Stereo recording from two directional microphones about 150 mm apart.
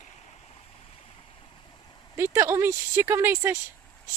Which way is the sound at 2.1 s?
15° right (ahead or behind).